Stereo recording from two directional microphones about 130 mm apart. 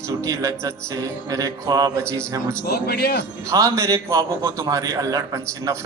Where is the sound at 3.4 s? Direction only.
25° right (ahead or behind).